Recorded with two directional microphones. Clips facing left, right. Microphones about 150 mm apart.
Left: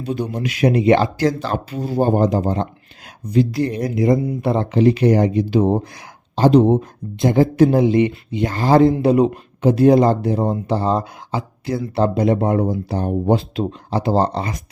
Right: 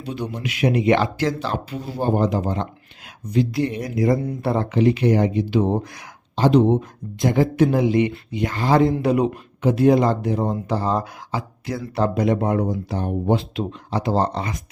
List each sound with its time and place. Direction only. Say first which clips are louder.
0.0 s speech: left 5 dB; 45° left (ahead or behind)
3.9 s speech: left 3 dB; 20° left (ahead or behind); by 6.8 s 40° left (ahead or behind)
7.2 s speech: left 4 dB; 25° left (ahead or behind)
7.5 s speech: left 4 dB; 35° left (ahead or behind)
8.5 s speech: left 4 dB; 40° left (ahead or behind)
8.8 s speech: left 5 dB; 30° left (ahead or behind)
9.2 s speech: left 4 dB; 40° left (ahead or behind)